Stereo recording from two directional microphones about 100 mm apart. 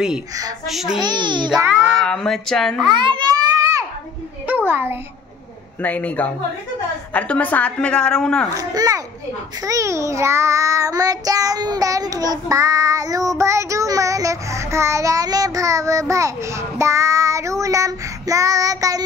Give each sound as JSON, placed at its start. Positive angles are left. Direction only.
{"t": 0.7, "sound": "a child's voice", "side_deg": 0}
{"t": 0.9, "sound": "a child's voice", "side_deg": -45}
{"t": 1.9, "sound": "speech", "side_deg": 5}
{"t": 2.9, "sound": "a child's voice", "side_deg": -55}
{"t": 4.5, "sound": "a sound", "side_deg": -20}
{"t": 5.8, "sound": "a woman's voice", "side_deg": 15}
{"t": 8.5, "sound": "a child's voice", "side_deg": -35}
{"t": 9.6, "sound": "child singing", "side_deg": -35}